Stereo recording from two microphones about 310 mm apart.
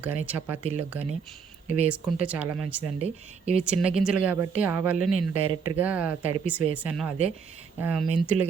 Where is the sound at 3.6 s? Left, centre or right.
Centre.